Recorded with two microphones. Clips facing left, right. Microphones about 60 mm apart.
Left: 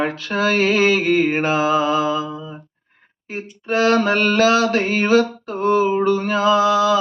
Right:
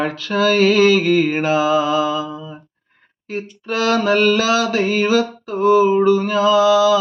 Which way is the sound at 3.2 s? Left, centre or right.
Left.